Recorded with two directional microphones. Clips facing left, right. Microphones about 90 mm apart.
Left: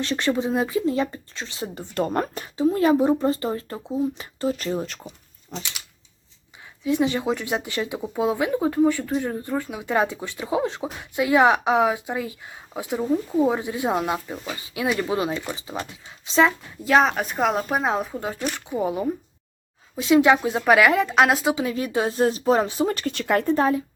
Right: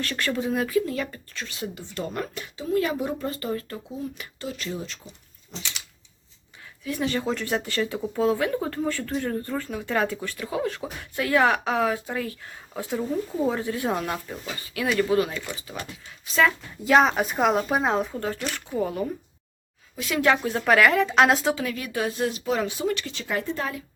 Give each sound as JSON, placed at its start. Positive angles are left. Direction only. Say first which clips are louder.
{"t": 0.0, "sound": "speech", "louder": "left 4 dB", "side_deg": 20}
{"t": 5.5, "sound": "a sound", "louder": "left 5 dB", "side_deg": 45}
{"t": 6.8, "sound": "speech", "louder": "left 5 dB", "side_deg": 20}
{"t": 16.8, "sound": "speech", "louder": "even", "side_deg": 0}
{"t": 21.5, "sound": "speech", "louder": "left 5 dB", "side_deg": 25}
{"t": 23.1, "sound": "speech", "louder": "left 7 dB", "side_deg": 60}
{"t": 23.6, "sound": "speech", "louder": "left 10 dB", "side_deg": 35}